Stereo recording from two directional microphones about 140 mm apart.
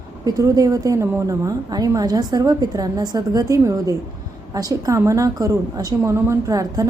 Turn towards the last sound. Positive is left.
turn(degrees=-25)  # may be behind; listen again after turning